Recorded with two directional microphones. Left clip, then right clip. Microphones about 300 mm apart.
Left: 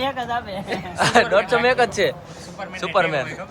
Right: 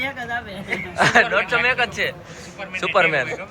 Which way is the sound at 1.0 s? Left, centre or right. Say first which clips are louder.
Even; centre.